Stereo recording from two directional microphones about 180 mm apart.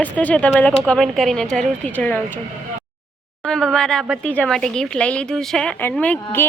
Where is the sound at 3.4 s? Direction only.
5° left (ahead or behind).